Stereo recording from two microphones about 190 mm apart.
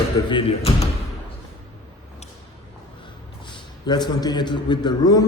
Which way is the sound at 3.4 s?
25° left (ahead or behind).